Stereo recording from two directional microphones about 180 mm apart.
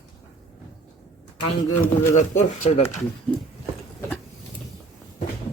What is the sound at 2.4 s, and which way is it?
Speech, 35° left (ahead or behind).